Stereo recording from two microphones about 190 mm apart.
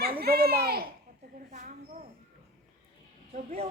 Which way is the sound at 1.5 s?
40° right (ahead or behind).